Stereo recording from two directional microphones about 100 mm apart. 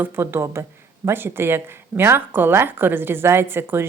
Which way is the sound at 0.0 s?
20° right (ahead or behind).